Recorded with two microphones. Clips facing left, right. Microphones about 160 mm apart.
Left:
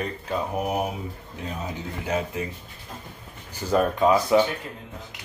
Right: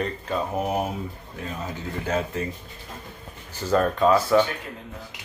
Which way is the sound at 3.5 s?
15° left (ahead or behind).